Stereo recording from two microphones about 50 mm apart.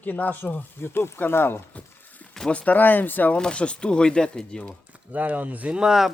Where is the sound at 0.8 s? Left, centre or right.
Left.